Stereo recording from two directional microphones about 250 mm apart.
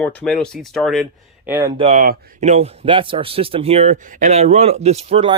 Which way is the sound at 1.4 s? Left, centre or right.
Centre.